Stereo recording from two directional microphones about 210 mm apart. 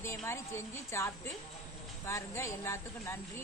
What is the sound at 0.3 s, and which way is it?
Speech, 10° left (ahead or behind).